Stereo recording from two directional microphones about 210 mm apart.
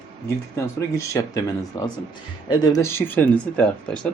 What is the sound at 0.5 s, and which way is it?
Speech, 15° left (ahead or behind).